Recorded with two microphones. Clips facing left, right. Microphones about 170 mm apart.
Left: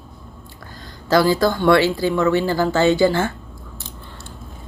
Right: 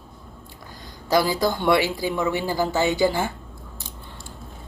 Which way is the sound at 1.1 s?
20° right (ahead or behind).